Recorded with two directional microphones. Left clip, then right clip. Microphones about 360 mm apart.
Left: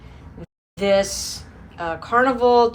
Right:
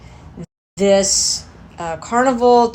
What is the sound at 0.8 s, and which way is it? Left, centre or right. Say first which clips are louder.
Speech: right 5 dB; centre.